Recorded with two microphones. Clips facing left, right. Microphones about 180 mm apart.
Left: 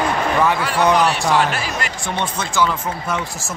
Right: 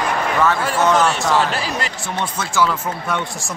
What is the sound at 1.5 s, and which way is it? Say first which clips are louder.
Speech: right 1 dB; 35° right (ahead or behind).